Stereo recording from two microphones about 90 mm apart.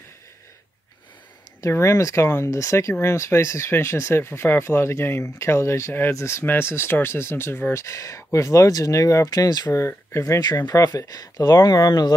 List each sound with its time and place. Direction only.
1.6 s speech: 30° left (ahead or behind)
9.8 s speech: 30° left (ahead or behind)
10.7 s speech: 45° left (ahead or behind)